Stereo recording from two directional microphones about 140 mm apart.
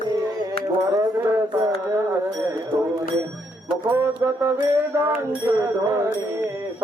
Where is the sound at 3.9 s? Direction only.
20° right (ahead or behind).